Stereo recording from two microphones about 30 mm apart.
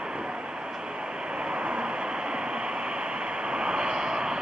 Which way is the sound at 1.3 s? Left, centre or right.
Right.